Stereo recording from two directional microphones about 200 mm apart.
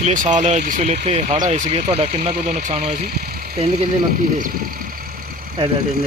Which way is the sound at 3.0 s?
50° right (ahead or behind).